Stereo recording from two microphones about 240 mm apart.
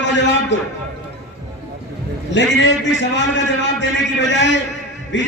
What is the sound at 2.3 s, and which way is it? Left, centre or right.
A man's voice, left.